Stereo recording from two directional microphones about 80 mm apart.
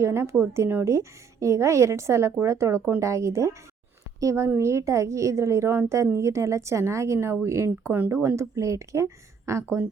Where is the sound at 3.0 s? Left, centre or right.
Right.